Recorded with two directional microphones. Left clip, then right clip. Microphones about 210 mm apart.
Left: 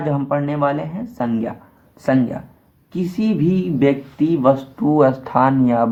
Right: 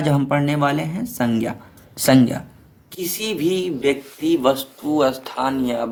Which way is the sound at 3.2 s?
45° right (ahead or behind).